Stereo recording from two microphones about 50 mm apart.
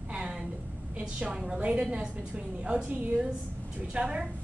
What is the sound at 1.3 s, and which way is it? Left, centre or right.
A woman's voice, centre.